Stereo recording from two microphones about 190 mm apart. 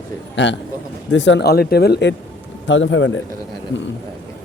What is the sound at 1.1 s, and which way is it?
Speech, 75° left (ahead or behind).